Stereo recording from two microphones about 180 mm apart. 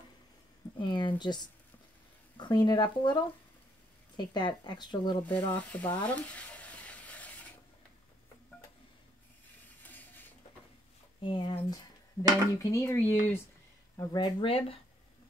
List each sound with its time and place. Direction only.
0.7 s speech: 25° left (ahead or behind)
5.2 s speech: 10° left (ahead or behind)
6.0 s stir: 10° left (ahead or behind)
9.8 s printer: 10° left (ahead or behind)
11.1 s speech: 25° left (ahead or behind)
13.9 s speech: 25° left (ahead or behind)